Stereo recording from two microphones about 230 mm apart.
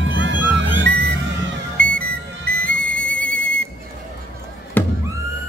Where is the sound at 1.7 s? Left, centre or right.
Centre.